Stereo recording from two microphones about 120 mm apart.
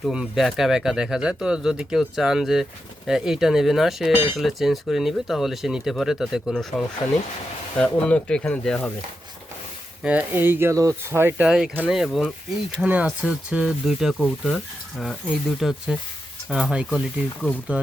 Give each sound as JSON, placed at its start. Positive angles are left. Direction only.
{"t": 0.0, "sound": "speech", "side_deg": -5}
{"t": 10.0, "sound": "speech", "side_deg": -10}
{"t": 11.4, "sound": "speech", "side_deg": -5}
{"t": 12.8, "sound": "speech", "side_deg": -10}